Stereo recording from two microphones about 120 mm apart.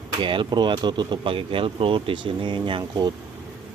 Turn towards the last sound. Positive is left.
turn(degrees=-35)  # may be behind; listen again after turning